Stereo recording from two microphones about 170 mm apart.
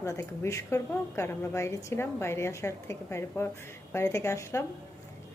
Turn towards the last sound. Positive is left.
turn(degrees=15)  # may be behind; listen again after turning